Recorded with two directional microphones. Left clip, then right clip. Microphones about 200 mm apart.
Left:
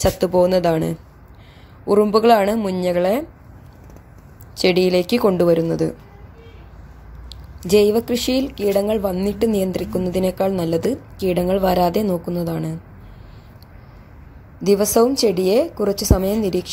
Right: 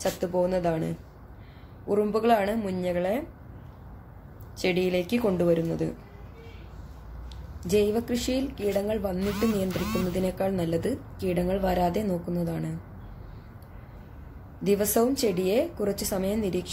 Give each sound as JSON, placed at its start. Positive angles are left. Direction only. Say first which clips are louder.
{"t": 0.0, "sound": "a woman's voice", "louder": "left 10 dB", "side_deg": 40}
{"t": 4.6, "sound": "a woman's voice", "louder": "left 10 dB", "side_deg": 40}
{"t": 7.6, "sound": "a woman's voice", "louder": "left 10 dB", "side_deg": 35}
{"t": 14.6, "sound": "a woman's voice", "louder": "left 9 dB", "side_deg": 30}